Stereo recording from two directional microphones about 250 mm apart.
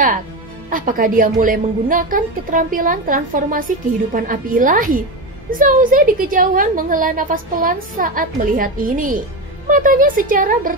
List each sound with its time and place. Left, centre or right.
0.7 s a woman's voice: right